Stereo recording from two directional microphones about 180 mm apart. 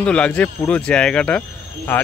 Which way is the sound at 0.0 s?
5° left (ahead or behind).